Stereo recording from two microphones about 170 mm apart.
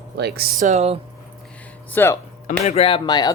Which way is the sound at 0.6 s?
40° right (ahead or behind).